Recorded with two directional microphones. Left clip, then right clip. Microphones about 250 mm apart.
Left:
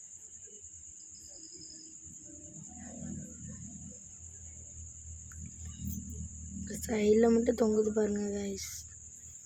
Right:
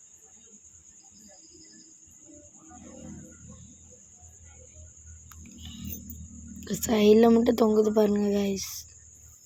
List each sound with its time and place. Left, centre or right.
6.7 s speech: right